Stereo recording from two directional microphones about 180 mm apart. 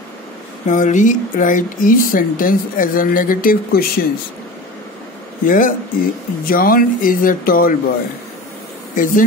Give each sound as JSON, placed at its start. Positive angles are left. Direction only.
{"t": 0.7, "sound": "speech", "side_deg": 45}
{"t": 5.4, "sound": "speech", "side_deg": 50}
{"t": 8.9, "sound": "speech", "side_deg": 50}